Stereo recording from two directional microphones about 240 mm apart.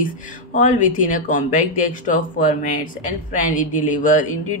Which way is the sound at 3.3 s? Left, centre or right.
Left.